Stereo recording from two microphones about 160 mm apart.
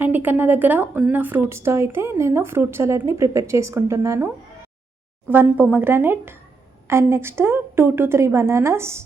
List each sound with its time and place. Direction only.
0.0 s a woman's voice: 10° right (ahead or behind)
5.3 s a woman's voice: 10° right (ahead or behind)